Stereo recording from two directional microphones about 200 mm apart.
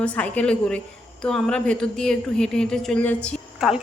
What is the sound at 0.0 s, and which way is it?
A woman's voice, 5° left (ahead or behind).